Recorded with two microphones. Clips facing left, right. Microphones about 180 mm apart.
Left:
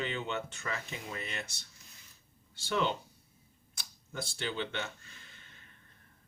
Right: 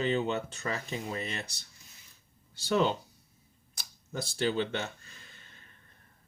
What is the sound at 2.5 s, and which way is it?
Speech, 40° right (ahead or behind).